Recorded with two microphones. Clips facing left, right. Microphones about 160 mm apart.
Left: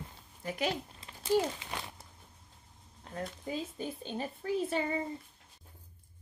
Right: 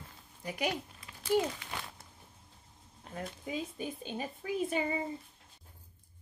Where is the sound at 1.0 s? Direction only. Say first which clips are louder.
Left 1 dB; 25° left (ahead or behind).